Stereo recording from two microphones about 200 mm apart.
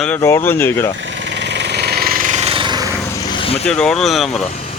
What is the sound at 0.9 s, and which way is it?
Jackhammer, 65° right (ahead or behind).